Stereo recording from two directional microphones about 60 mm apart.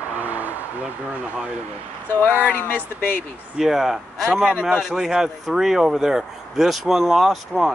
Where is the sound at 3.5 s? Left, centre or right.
Centre.